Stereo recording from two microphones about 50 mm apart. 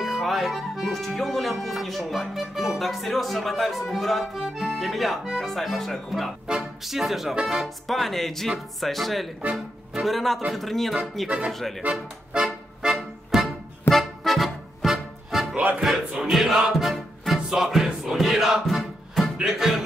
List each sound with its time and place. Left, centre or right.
0.0 s speech: centre
6.4 s speech: centre
9.4 s speech: right
10.0 s speech: centre
11.8 s speech: right
12.4 s music: centre
15.5 s music: right
15.8 s music: centre